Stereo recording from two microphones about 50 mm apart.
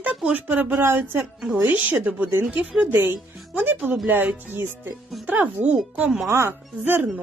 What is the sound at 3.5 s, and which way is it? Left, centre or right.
Music, right.